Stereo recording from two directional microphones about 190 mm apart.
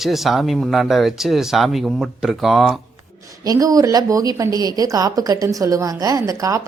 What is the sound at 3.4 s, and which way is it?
A woman's voice, 20° right (ahead or behind).